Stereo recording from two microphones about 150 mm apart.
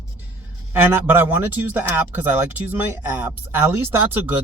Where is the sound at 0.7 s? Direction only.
15° right (ahead or behind).